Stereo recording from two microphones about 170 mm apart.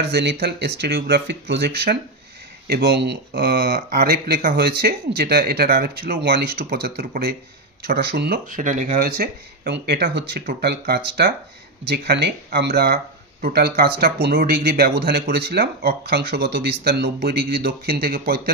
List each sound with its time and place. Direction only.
0.1 s speech: 80° right; by 18.5 s 60° right (ahead or behind)